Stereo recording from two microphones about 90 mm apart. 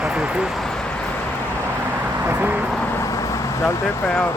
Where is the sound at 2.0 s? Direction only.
25° right (ahead or behind).